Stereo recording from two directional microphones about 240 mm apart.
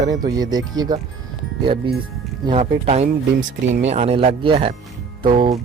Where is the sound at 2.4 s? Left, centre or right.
Right.